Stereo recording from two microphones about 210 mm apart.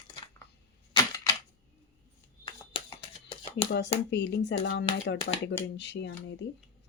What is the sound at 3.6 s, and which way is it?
Speech, 25° left (ahead or behind).